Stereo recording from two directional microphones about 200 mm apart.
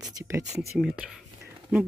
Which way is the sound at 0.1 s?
20° right (ahead or behind).